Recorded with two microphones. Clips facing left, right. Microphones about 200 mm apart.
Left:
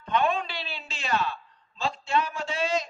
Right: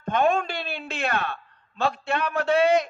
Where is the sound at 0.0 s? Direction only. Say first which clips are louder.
Right 4 dB; 45° right (ahead or behind).